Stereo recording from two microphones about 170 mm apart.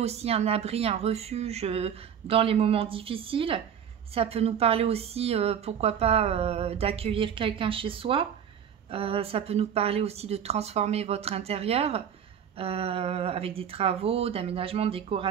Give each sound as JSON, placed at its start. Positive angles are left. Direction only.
{"t": 0.0, "sound": "a woman's voice", "side_deg": -40}